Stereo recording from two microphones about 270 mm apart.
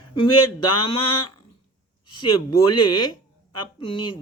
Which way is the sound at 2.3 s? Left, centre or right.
Left.